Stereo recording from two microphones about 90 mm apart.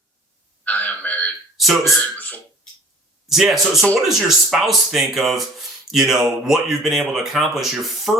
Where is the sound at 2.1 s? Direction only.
20° left (ahead or behind).